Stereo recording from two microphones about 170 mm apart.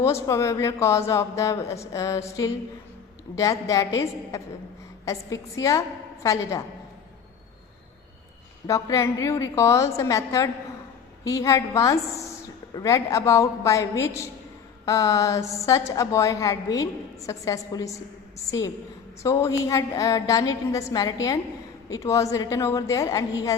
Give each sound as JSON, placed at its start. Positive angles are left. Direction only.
{"t": 0.0, "sound": "a woman's voice", "side_deg": 15}
{"t": 8.6, "sound": "a woman's voice", "side_deg": 20}
{"t": 19.2, "sound": "a woman's voice", "side_deg": 20}